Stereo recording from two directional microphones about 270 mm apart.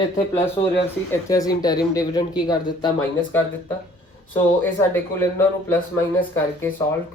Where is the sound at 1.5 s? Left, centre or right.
Centre.